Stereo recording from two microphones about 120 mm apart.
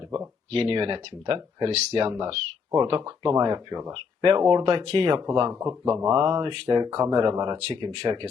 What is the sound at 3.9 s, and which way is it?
Speech, 45° right (ahead or behind).